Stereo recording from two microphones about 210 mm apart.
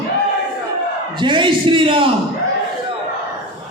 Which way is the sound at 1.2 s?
25° right (ahead or behind).